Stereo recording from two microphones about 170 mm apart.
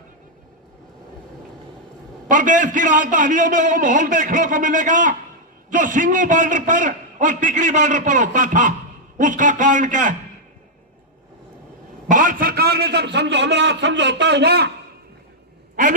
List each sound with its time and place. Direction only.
2.3 s a man's voice: 50° right (ahead or behind)
12.0 s a man's voice: 50° right (ahead or behind); by 14.7 s 75° right (ahead or behind)
15.7 s a sound: 50° right (ahead or behind)